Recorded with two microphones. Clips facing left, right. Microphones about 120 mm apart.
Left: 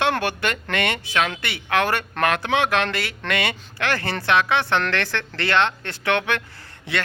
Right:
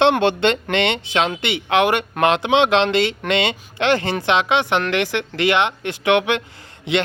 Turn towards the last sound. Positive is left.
turn(degrees=-20)  # may be behind; listen again after turning